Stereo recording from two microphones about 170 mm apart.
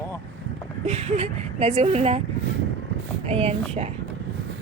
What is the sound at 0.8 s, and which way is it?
Speech, 40° right (ahead or behind).